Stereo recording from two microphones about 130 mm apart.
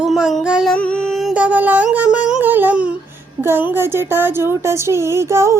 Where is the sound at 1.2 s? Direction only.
10° right (ahead or behind).